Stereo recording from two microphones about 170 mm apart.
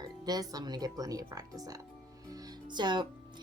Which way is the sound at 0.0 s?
25° right (ahead or behind).